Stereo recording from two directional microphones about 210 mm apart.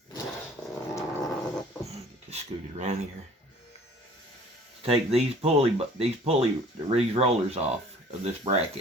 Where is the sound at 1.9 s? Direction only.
30° right (ahead or behind).